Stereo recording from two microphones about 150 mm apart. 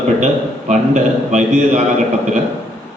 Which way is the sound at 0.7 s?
50° right (ahead or behind).